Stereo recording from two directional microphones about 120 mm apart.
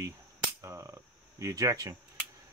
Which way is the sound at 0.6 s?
25° right (ahead or behind).